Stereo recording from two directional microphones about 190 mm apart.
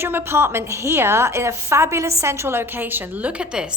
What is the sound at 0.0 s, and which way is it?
A woman's voice, 10° right (ahead or behind).